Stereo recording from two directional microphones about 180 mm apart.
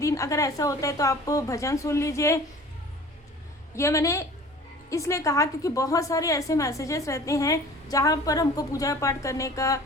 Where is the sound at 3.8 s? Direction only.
15° left (ahead or behind).